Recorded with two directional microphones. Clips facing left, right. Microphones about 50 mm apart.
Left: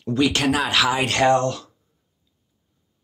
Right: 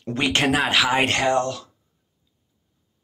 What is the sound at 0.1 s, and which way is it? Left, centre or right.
Speech, right.